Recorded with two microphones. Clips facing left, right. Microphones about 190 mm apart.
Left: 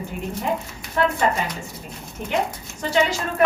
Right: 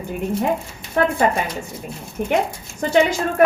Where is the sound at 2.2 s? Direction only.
55° right (ahead or behind).